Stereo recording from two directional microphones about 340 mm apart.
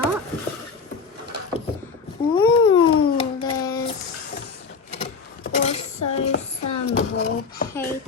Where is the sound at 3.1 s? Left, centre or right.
Centre.